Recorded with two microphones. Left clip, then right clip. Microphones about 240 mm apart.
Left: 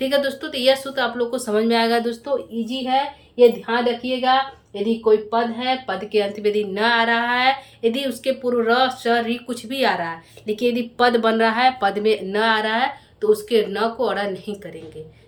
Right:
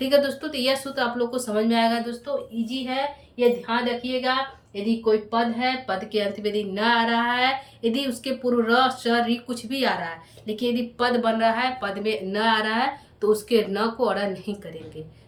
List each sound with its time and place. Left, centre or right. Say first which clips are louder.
0.0 s speech: even; centre
3.3 s a woman's voice: left 7 dB; centre